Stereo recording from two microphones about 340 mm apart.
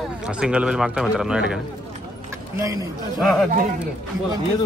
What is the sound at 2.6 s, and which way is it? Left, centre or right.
Speech, centre.